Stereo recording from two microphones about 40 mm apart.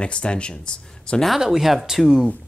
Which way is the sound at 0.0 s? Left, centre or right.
Left.